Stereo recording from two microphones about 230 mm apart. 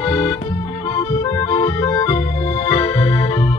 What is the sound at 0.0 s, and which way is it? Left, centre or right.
Accordion, centre.